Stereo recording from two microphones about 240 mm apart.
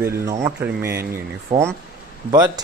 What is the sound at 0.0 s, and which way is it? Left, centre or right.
Speech, centre.